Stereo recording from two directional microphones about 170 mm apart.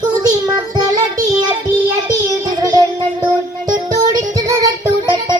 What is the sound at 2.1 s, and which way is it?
Child singing, 20° right (ahead or behind).